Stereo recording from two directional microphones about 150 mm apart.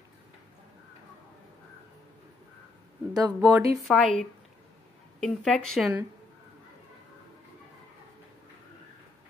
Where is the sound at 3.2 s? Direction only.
25° right (ahead or behind).